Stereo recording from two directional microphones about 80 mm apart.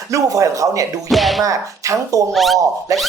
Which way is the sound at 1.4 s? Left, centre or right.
Right.